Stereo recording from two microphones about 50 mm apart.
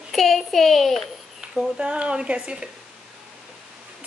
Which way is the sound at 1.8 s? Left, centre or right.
Right.